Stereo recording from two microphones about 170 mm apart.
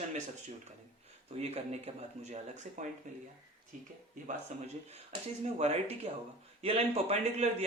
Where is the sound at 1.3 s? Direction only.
40° right (ahead or behind).